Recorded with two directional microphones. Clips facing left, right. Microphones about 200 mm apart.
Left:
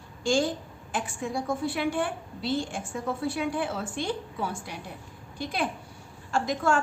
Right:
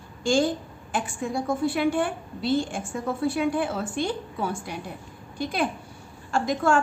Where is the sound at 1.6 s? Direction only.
50° right (ahead or behind).